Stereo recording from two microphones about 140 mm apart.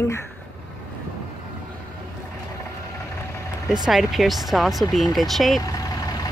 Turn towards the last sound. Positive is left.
turn(degrees=0)  # may be behind; listen again after turning